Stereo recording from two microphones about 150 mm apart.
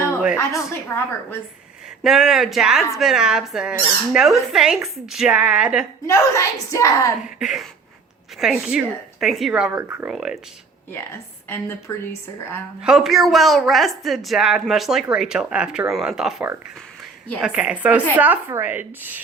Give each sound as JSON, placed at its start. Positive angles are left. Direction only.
{"t": 0.3, "sound": "a woman's voice", "side_deg": 15}
{"t": 2.0, "sound": "a woman's voice", "side_deg": 0}
{"t": 6.1, "sound": "a woman's voice", "side_deg": 20}
{"t": 7.3, "sound": "a woman's voice", "side_deg": -5}
{"t": 11.9, "sound": "a woman's voice", "side_deg": 15}
{"t": 12.8, "sound": "a woman's voice", "side_deg": 0}